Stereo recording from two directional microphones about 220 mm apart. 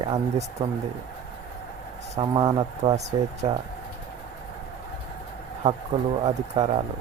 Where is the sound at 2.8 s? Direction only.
30° right (ahead or behind).